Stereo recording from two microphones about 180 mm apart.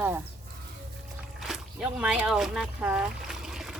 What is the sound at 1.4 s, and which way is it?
Speech, centre (ahead or behind).